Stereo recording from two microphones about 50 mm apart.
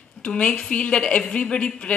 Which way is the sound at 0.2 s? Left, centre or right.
Centre.